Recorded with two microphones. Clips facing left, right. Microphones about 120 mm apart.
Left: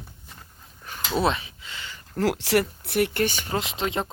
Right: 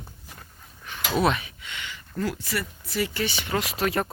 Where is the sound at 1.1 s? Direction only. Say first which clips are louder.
Even; 30° left (ahead or behind).